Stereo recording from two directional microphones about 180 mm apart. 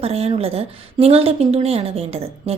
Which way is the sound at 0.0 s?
35° right (ahead or behind).